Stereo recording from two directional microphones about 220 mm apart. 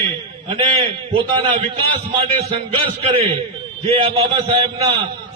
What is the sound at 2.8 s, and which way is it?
A man's voice, 30° right (ahead or behind).